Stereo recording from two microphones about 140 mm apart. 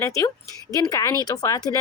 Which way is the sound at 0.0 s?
20° left (ahead or behind).